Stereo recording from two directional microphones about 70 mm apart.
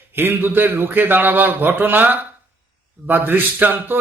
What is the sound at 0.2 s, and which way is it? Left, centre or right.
A man's voice, right.